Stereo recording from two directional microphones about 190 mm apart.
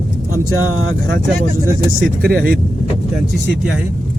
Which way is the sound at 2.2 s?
55° right (ahead or behind).